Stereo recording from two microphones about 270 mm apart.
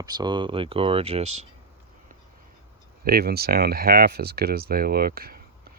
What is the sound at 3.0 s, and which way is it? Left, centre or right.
Speech, right.